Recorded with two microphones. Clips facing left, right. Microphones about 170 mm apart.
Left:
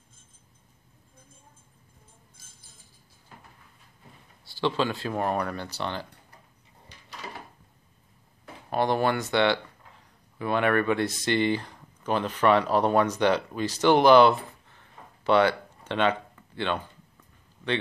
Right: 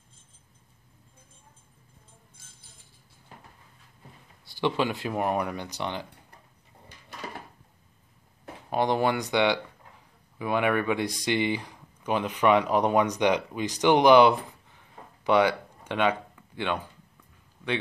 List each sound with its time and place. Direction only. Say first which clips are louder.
4.5 s speech: even; 15° right (ahead or behind)
8.6 s speech: even; 15° right (ahead or behind)